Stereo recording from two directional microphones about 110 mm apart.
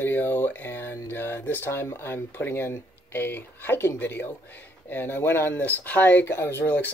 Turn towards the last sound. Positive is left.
turn(degrees=15)  # may be behind; listen again after turning